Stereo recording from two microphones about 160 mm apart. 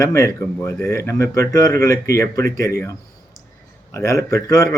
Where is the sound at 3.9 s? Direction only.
20° left (ahead or behind).